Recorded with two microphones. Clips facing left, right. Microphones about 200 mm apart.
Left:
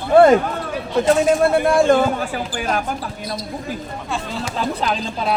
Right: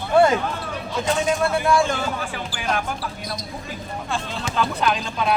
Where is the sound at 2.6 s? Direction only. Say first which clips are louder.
Left 2 dB; 40° left (ahead or behind).